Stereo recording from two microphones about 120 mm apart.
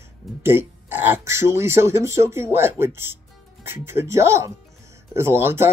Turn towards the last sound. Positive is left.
turn(degrees=-20)  # may be behind; listen again after turning